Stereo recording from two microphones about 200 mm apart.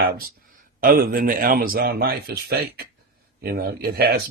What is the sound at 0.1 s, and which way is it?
Speech, 50° right (ahead or behind).